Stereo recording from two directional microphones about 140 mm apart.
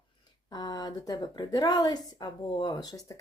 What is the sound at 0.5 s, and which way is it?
A woman's voice, 30° left (ahead or behind).